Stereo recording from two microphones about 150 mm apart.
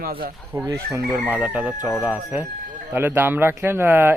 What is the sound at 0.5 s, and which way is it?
Speech, 20° right (ahead or behind).